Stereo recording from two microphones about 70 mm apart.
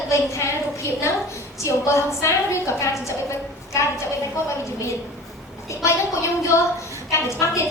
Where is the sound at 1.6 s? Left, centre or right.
Left.